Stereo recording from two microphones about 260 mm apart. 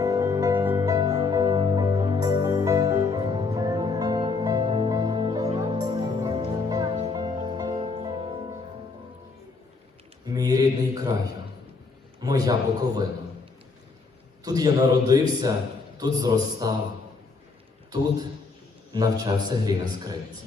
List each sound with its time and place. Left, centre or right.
0.0 s music: centre
10.2 s mantra: centre
12.2 s a man's voice: centre
14.4 s a man's voice: centre
18.9 s a man's voice: centre